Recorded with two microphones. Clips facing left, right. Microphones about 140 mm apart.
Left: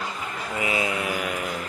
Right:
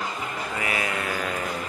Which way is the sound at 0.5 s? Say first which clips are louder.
Left 3 dB; 20° left (ahead or behind).